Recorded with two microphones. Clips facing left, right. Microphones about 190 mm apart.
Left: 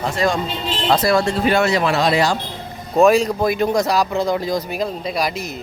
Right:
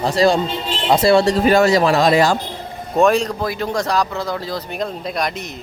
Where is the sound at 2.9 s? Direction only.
5° left (ahead or behind).